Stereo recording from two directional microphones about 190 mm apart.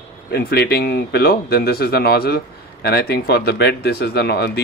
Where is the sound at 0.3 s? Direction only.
55° left (ahead or behind).